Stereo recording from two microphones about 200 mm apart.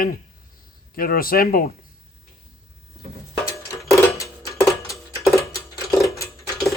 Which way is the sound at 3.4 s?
15° left (ahead or behind).